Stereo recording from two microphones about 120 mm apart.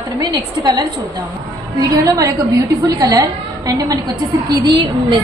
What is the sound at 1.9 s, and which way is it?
A woman's voice, 30° right (ahead or behind).